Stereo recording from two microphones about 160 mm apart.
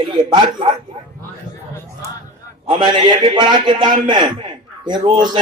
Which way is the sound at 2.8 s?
30° right (ahead or behind).